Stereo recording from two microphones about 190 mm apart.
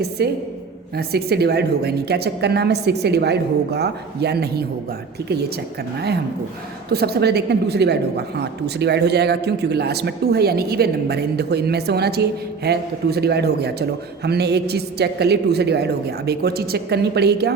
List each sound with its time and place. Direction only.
0.2 s a woman's voice: 60° right (ahead or behind)
6.9 s a woman's voice: 55° right (ahead or behind)